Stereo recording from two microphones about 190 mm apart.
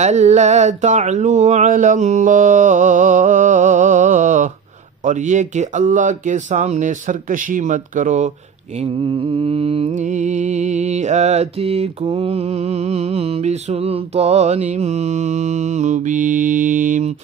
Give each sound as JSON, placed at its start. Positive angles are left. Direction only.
{"t": 0.0, "sound": "mantra", "side_deg": -35}
{"t": 8.7, "sound": "mantra", "side_deg": -30}